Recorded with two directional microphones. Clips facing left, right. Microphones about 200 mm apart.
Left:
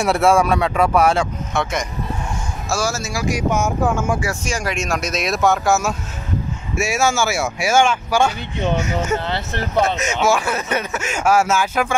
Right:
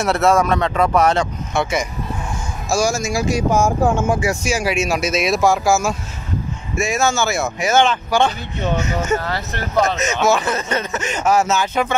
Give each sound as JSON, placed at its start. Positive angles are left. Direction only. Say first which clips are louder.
{"t": 0.0, "sound": "speech", "louder": "even", "side_deg": 10}
{"t": 1.6, "sound": "speech", "louder": "right 3 dB", "side_deg": 0}
{"t": 2.7, "sound": "speech", "louder": "right 4 dB", "side_deg": -15}
{"t": 4.3, "sound": "speech", "louder": "right 4 dB", "side_deg": -5}
{"t": 9.9, "sound": "speech", "louder": "right 1 dB", "side_deg": 10}